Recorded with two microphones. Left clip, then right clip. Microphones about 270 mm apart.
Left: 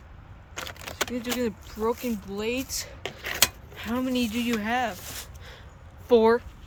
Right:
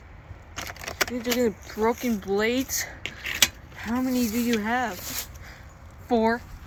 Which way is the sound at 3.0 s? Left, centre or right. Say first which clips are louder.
Right 1 dB; centre.